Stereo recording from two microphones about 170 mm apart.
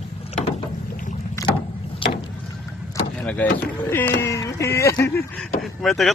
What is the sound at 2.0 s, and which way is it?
Rowboat, 30° left (ahead or behind).